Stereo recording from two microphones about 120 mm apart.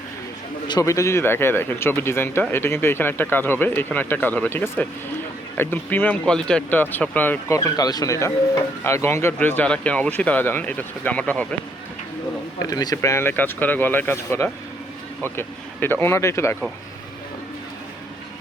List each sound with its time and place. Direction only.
0.7 s speech: 25° left (ahead or behind)
12.5 s speech: 30° left (ahead or behind)